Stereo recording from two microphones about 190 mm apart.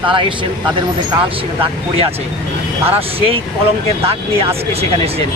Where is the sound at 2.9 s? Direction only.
30° right (ahead or behind).